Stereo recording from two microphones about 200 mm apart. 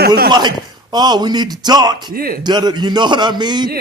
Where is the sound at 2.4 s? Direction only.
20° right (ahead or behind).